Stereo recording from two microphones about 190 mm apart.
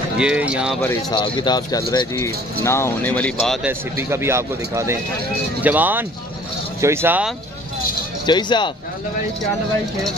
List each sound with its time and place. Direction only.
0.2 s speech: 5° right (ahead or behind)
1.1 s speech: 25° left (ahead or behind); by 3.5 s 5° left (ahead or behind)
3.6 s speech: 15° right (ahead or behind)
8.3 s speech: 25° left (ahead or behind)